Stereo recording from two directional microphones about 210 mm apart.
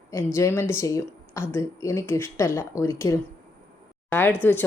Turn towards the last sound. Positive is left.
turn(degrees=10)  # may be behind; listen again after turning